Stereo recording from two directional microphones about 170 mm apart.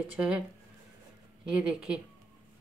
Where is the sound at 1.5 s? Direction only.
5° right (ahead or behind).